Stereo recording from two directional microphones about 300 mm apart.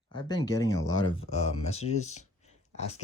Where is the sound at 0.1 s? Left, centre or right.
Centre.